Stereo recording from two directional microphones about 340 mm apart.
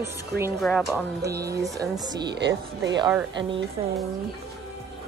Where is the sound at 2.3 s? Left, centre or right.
Right.